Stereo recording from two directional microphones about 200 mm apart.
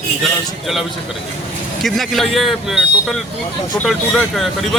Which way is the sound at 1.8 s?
Centre (ahead or behind).